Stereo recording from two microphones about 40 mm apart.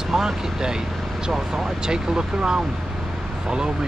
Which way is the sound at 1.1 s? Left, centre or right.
Centre.